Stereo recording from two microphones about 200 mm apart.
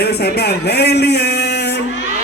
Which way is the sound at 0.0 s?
55° left (ahead or behind).